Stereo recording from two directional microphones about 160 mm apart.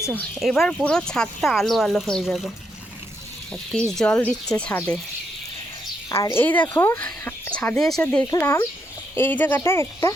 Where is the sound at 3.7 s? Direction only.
5° left (ahead or behind).